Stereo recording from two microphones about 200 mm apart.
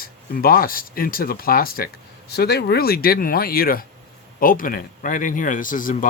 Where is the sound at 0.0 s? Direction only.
45° left (ahead or behind).